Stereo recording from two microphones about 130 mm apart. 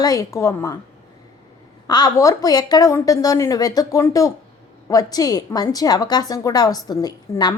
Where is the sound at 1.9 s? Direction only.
30° left (ahead or behind).